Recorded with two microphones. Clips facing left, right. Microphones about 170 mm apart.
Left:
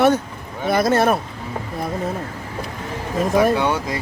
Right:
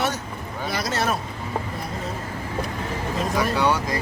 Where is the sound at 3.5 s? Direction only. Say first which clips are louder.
Left 1 dB; 25° left (ahead or behind).